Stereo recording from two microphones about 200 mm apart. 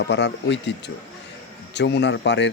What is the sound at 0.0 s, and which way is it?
Speech, 60° left (ahead or behind).